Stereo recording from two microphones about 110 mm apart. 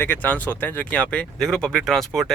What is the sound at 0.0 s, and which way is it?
Speech, 20° left (ahead or behind).